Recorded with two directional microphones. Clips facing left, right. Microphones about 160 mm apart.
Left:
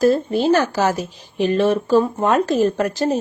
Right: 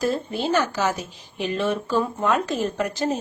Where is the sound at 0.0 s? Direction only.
45° left (ahead or behind).